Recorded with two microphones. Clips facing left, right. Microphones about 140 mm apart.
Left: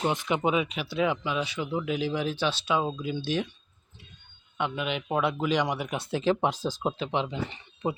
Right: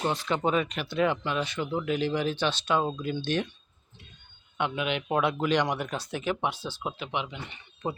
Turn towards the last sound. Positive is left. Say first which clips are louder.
# left 3 dB
turn(degrees=15)  # may be behind; listen again after turning